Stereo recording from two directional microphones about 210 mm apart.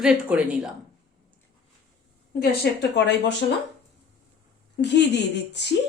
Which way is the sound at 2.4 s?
50° left (ahead or behind).